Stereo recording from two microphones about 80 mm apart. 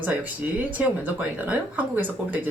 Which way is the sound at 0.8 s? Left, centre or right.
Right.